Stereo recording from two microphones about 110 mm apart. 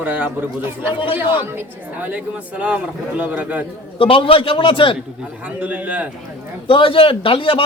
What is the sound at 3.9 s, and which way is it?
A man's voice, 55° left (ahead or behind).